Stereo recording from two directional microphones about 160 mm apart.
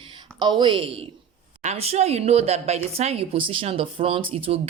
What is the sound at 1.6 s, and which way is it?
A woman's voice, 40° right (ahead or behind).